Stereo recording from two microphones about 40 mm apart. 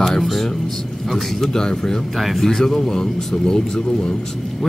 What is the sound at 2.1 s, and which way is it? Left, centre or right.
Speech, centre.